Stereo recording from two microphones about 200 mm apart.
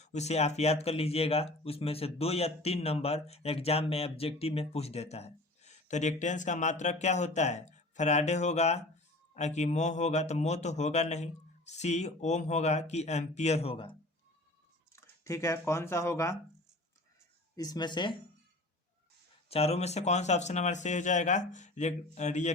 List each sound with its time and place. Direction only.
0.0 s speech: 35° left (ahead or behind)
14.9 s speech: 15° left (ahead or behind)
17.6 s speech: 20° left (ahead or behind)
19.5 s speech: 30° left (ahead or behind)